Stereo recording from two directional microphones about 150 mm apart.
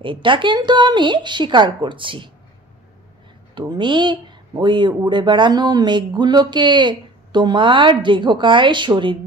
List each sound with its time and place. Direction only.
0.0 s speech: 35° right (ahead or behind)
3.5 s speech: 30° right (ahead or behind)